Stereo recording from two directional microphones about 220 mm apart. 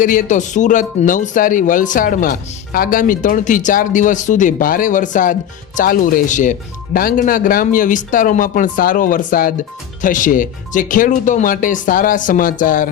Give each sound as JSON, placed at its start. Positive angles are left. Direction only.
{"t": 0.0, "sound": "speech", "side_deg": 35}